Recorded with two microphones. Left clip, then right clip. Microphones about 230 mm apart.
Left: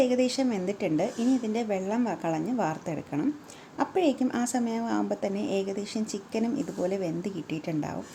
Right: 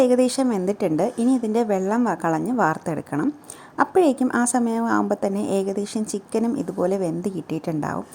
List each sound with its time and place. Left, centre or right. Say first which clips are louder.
0.0 s a woman's voice: right 7 dB; right